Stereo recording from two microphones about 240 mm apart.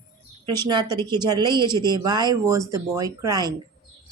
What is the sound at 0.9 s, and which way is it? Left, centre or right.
Speech, centre.